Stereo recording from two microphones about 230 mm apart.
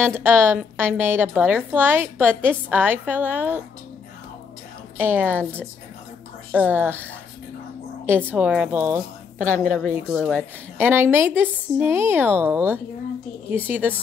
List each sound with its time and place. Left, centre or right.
0.0 s a woman's voice: centre
4.9 s a woman's voice: centre
5.4 s speech: centre
6.5 s a woman's voice: centre
8.3 s a woman's voice: centre
9.4 s a woman's voice: right
9.9 s a woman's voice: centre